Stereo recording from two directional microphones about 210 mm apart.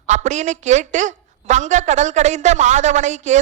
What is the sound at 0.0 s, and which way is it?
A woman's voice, 35° right (ahead or behind).